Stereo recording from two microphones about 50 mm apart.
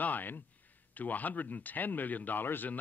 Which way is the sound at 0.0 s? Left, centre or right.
Left.